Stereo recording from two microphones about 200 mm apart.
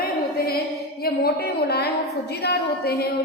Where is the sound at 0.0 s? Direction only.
50° left (ahead or behind).